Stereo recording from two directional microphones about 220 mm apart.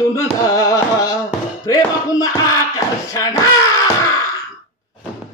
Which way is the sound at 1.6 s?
15° left (ahead or behind).